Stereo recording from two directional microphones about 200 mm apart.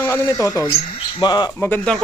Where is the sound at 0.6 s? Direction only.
30° left (ahead or behind); by 1.9 s 10° left (ahead or behind).